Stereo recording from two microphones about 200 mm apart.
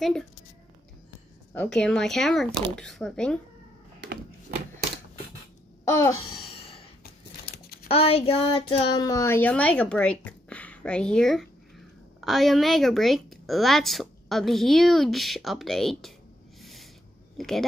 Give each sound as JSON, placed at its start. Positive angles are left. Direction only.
{"t": 1.5, "sound": "a woman's voice", "side_deg": 5}
{"t": 5.9, "sound": "a sound", "side_deg": 15}
{"t": 7.0, "sound": "crumpling", "side_deg": 50}
{"t": 7.9, "sound": "a woman's voice", "side_deg": 30}
{"t": 16.6, "sound": "a sound", "side_deg": 0}
{"t": 17.4, "sound": "a woman's voice", "side_deg": 0}